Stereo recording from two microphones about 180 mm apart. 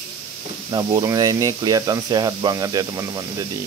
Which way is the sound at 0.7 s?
20° right (ahead or behind).